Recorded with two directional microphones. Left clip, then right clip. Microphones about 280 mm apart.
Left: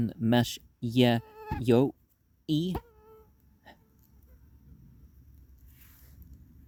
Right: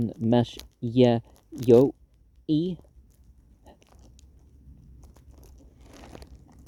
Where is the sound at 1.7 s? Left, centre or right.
Left.